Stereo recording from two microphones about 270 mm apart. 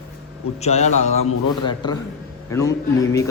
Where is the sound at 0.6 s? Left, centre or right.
Left.